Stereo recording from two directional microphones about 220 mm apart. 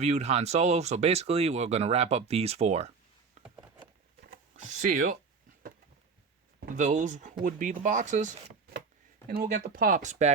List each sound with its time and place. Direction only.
0.0 s speech: 30° right (ahead or behind)
3.4 s a sound: 30° right (ahead or behind)
4.9 s speech: 35° right (ahead or behind)
6.7 s speech: 35° right (ahead or behind)